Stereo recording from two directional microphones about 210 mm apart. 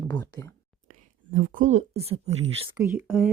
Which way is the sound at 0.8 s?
40° right (ahead or behind).